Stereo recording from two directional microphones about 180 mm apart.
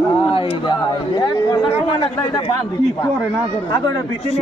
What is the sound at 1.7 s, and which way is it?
Speech, 30° left (ahead or behind).